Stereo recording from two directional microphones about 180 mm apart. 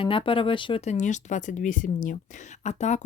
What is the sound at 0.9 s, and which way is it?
Speech, 40° left (ahead or behind).